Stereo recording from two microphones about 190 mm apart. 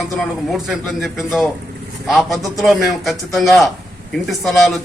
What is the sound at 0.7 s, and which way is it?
A man's voice, centre (ahead or behind).